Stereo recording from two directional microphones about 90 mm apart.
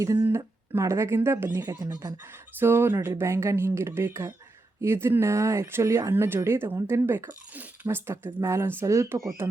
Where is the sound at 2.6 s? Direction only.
25° right (ahead or behind).